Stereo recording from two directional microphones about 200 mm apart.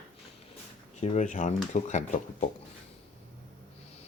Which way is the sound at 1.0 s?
35° left (ahead or behind).